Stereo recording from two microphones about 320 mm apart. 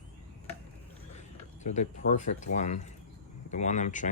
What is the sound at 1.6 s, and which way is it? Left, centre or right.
Speech, left.